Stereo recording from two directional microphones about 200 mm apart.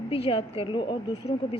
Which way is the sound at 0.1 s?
30° left (ahead or behind).